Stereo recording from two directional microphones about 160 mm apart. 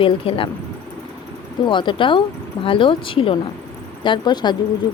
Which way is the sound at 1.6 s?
30° left (ahead or behind).